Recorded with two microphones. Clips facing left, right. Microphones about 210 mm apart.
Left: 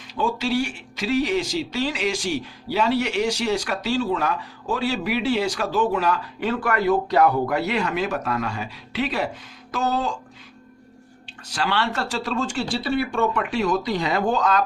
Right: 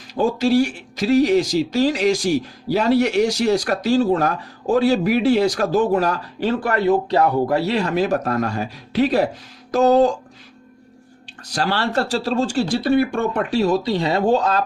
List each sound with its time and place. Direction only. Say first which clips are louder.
0.1 s speech: right 6 dB; 40° right (ahead or behind)
11.5 s speech: right 4 dB; 35° right (ahead or behind)